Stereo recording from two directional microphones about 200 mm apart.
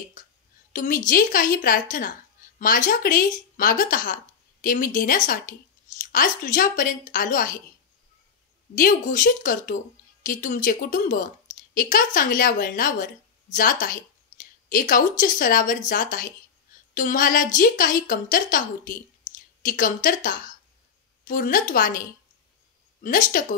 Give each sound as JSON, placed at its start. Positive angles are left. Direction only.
{"t": 0.2, "sound": "a sound", "side_deg": 40}
{"t": 0.7, "sound": "speech", "side_deg": 40}
{"t": 8.7, "sound": "a woman's voice", "side_deg": 40}
{"t": 21.3, "sound": "speech", "side_deg": 45}
{"t": 23.0, "sound": "a woman's voice", "side_deg": 40}